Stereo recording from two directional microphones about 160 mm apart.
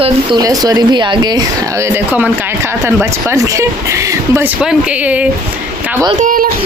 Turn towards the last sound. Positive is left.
turn(degrees=-60)  # may be behind; listen again after turning